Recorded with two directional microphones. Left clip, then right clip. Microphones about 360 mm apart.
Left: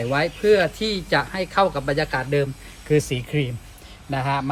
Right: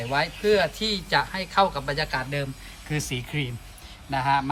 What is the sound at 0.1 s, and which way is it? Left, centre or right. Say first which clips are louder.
Speech: left 4 dB; centre.